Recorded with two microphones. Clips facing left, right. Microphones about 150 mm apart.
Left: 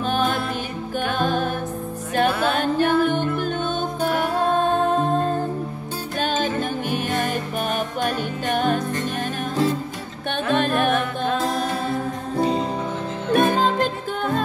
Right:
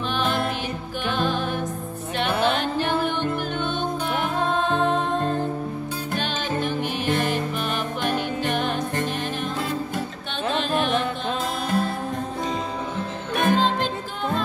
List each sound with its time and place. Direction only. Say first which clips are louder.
0.1 s music: left 1 dB; 45° left (ahead or behind)
6.1 s music: left 5 dB; 45° left (ahead or behind)
10.5 s music: left 4 dB; 50° left (ahead or behind)
12.4 s music: left 10 dB; 30° left (ahead or behind)
13.3 s music: left 3 dB; 45° left (ahead or behind)